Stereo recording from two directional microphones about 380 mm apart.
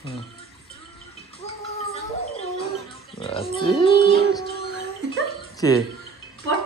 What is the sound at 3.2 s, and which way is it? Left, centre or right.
A man's voice, centre.